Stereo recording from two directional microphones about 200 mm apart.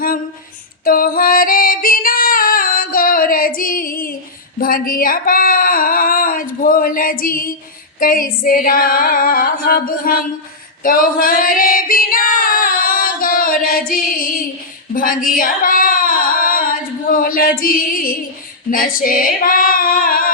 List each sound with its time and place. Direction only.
0.9 s female singing: 45° left (ahead or behind)
4.6 s a sound: 45° left (ahead or behind)
7.9 s female singing: 45° left (ahead or behind)